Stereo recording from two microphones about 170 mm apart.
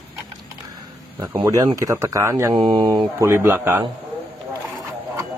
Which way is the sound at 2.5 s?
25° right (ahead or behind).